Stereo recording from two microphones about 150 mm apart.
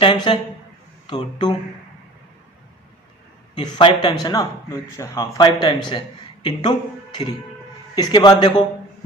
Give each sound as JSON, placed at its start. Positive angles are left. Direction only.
{"t": 0.0, "sound": "a man's voice", "side_deg": 35}
{"t": 3.5, "sound": "a man's voice", "side_deg": 30}